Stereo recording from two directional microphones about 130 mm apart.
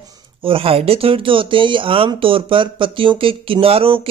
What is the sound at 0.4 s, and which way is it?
Speech, 45° right (ahead or behind).